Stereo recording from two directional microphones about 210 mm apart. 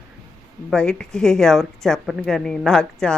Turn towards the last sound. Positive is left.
turn(degrees=5)  # may be behind; listen again after turning